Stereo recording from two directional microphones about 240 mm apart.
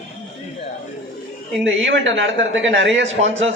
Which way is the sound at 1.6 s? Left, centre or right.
Right.